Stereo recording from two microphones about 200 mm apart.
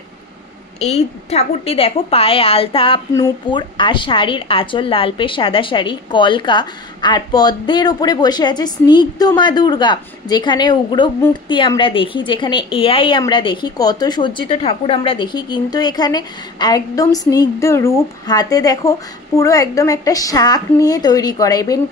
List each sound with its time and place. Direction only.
0.7 s speech: 35° left (ahead or behind)